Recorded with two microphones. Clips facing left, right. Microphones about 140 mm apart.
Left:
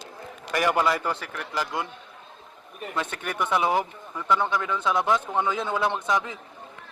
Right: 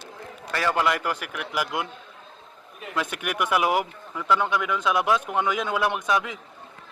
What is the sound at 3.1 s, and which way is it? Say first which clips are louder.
Speech: right 1 dB; 10° right (ahead or behind).